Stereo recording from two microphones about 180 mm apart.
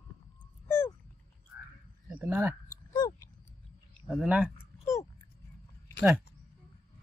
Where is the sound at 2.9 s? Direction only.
20° left (ahead or behind).